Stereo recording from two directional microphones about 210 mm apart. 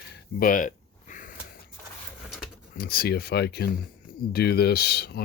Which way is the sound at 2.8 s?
45° left (ahead or behind).